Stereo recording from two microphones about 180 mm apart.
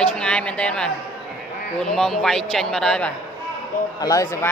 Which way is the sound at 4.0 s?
20° left (ahead or behind).